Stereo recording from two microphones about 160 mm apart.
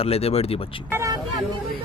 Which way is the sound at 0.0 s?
40° left (ahead or behind).